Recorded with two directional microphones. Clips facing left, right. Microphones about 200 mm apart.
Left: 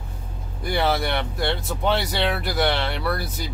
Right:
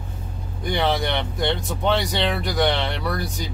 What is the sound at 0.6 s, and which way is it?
Speech, 5° left (ahead or behind).